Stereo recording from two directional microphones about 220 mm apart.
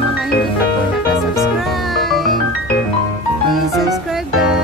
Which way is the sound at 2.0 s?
Centre (ahead or behind).